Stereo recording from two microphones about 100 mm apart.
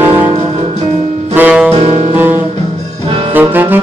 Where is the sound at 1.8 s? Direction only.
90° right.